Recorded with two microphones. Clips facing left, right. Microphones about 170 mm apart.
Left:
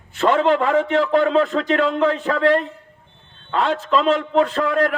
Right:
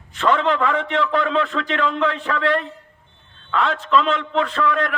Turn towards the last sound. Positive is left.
turn(degrees=40)  # may be behind; listen again after turning